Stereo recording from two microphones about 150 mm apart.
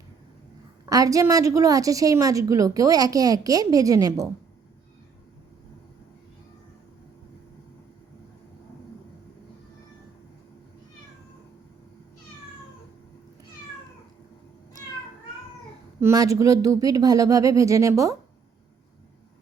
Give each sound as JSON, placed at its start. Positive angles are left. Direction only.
{"t": 0.9, "sound": "a woman's voice", "side_deg": -25}
{"t": 16.0, "sound": "a woman's voice", "side_deg": -20}